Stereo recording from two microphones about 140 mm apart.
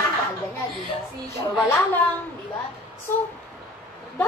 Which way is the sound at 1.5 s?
15° left (ahead or behind).